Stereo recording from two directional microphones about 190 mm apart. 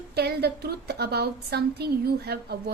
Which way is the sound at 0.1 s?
55° right (ahead or behind).